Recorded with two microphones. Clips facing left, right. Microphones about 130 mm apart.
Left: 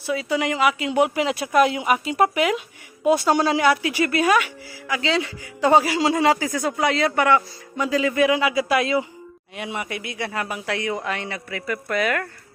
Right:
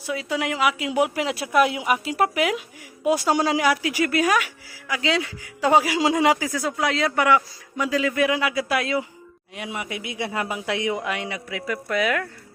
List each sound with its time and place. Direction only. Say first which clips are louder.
0.1 s speech: left 3 dB; centre (ahead or behind)
6.5 s speech: left 2 dB; centre (ahead or behind)